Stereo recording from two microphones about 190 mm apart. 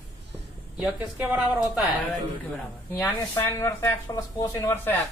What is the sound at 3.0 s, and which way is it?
A man's voice, 10° left (ahead or behind).